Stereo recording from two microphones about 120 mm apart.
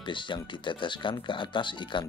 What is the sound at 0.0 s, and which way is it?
Speech, 40° left (ahead or behind).